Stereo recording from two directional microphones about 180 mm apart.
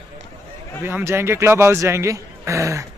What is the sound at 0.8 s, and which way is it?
Speech, 10° right (ahead or behind).